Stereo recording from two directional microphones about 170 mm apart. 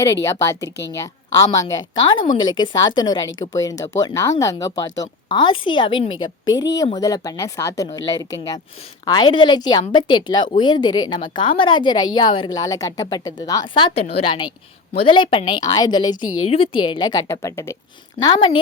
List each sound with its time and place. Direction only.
0.0 s a woman's voice: 15° left (ahead or behind)